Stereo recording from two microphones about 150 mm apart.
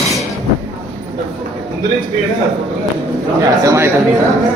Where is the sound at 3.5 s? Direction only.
20° right (ahead or behind).